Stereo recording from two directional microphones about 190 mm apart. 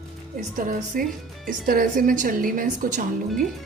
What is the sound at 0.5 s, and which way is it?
Speech, 45° right (ahead or behind).